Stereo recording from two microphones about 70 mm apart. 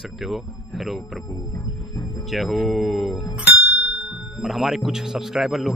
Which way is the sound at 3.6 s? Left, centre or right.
Centre.